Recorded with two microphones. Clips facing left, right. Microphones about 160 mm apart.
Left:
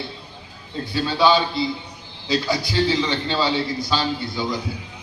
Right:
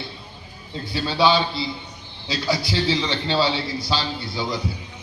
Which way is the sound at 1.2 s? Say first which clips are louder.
Left 1 dB; 50° left (ahead or behind).